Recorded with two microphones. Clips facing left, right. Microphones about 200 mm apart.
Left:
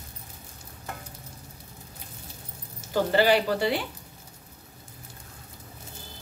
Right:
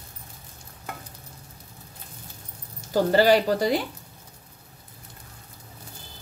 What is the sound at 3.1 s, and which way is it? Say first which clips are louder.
Speech: right 3 dB; 40° right (ahead or behind).